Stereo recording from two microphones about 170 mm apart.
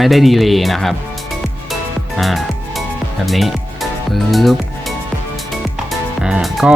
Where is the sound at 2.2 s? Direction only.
Centre (ahead or behind).